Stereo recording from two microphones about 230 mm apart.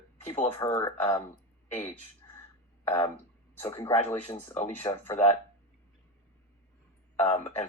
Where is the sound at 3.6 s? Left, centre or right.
Centre.